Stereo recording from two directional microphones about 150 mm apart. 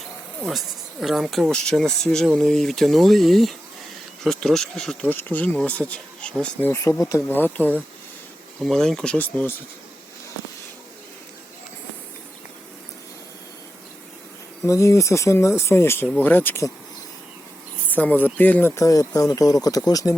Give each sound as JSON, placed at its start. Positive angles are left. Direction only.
{"t": 0.4, "sound": "speech", "side_deg": 0}
{"t": 14.7, "sound": "speech", "side_deg": 20}
{"t": 17.8, "sound": "speech", "side_deg": 10}